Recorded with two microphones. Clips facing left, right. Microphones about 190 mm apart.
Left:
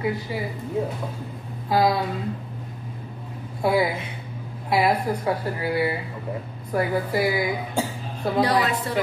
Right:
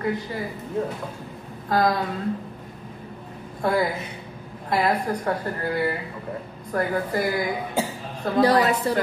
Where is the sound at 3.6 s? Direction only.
10° left (ahead or behind).